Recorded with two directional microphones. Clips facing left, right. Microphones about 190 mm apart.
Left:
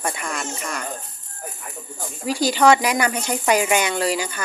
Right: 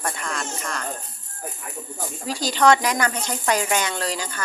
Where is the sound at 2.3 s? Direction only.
10° left (ahead or behind).